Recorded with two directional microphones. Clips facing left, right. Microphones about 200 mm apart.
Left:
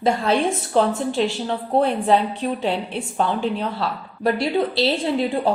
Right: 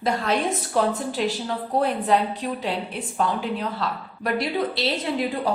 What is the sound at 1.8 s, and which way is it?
A woman's voice, 30° left (ahead or behind).